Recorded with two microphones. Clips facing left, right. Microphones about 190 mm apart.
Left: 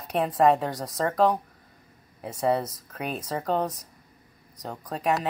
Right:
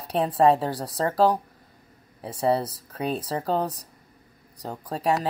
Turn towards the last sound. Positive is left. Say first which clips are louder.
# right 2 dB
turn(degrees=-30)  # may be behind; listen again after turning